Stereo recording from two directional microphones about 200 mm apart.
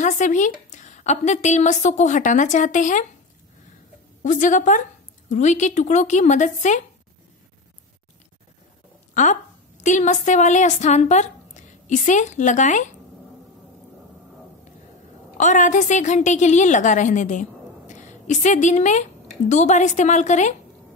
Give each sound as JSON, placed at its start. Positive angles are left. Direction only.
{"t": 0.0, "sound": "a woman's voice", "side_deg": 40}
{"t": 4.2, "sound": "a woman's voice", "side_deg": 40}
{"t": 9.1, "sound": "a woman's voice", "side_deg": 40}
{"t": 15.3, "sound": "a woman's voice", "side_deg": 40}